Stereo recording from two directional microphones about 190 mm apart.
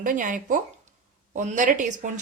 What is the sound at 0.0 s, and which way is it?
Speech, 45° right (ahead or behind).